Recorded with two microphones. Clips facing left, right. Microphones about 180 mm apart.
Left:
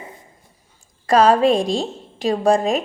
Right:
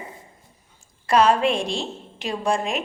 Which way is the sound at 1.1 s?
40° left (ahead or behind).